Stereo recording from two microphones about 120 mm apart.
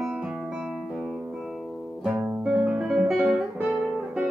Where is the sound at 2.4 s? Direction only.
5° right (ahead or behind).